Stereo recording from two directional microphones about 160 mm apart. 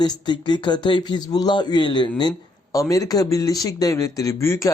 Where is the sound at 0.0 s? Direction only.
25° left (ahead or behind).